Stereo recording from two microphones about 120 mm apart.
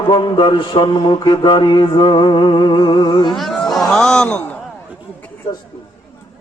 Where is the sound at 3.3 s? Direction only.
5° left (ahead or behind).